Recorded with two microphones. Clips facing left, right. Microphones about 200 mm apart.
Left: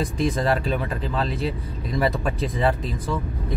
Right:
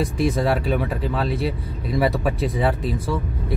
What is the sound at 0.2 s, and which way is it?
Speech, 5° right (ahead or behind).